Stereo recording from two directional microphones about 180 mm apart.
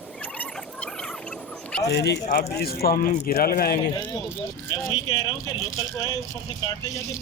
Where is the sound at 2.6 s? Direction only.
60° left (ahead or behind).